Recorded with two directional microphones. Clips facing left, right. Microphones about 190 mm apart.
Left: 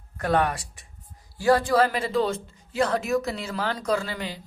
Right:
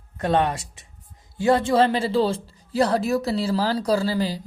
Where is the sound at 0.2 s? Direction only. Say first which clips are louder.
Right 2 dB; 25° right (ahead or behind).